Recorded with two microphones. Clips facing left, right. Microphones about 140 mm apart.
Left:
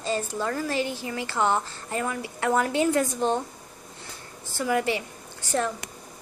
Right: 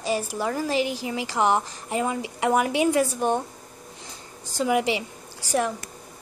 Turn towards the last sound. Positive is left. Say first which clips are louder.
# right 2 dB
turn(degrees=-10)  # may be behind; listen again after turning